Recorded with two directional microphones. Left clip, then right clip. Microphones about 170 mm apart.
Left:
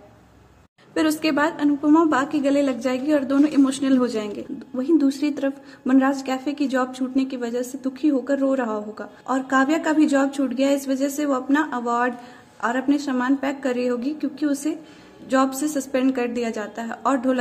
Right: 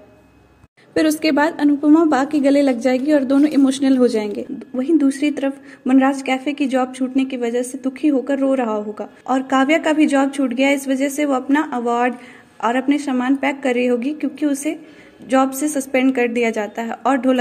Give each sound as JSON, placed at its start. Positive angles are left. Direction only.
{"t": 0.9, "sound": "a woman's voice", "side_deg": -20}
{"t": 4.7, "sound": "a woman's voice", "side_deg": -10}